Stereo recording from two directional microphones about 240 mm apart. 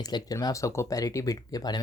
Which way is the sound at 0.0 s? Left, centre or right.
Centre.